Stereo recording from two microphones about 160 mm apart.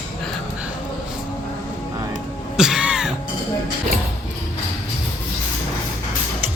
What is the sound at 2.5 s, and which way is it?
Music, 5° right (ahead or behind).